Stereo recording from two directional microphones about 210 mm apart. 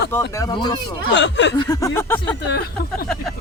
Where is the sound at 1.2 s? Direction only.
55° left (ahead or behind).